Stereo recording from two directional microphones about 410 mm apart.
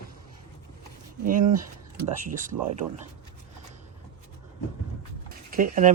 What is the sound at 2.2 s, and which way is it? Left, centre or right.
Speech, centre.